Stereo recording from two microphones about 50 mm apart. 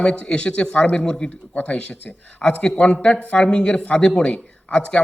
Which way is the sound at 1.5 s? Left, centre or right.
Left.